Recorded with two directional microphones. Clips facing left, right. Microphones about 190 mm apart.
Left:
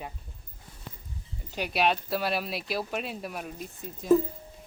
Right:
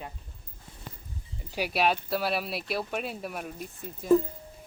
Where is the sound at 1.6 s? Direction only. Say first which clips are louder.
Even; 5° right (ahead or behind).